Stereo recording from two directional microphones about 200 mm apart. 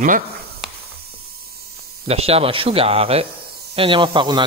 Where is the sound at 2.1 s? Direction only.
30° right (ahead or behind).